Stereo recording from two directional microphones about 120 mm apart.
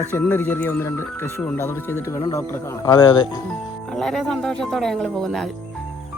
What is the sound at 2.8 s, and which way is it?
Speech, 35° left (ahead or behind).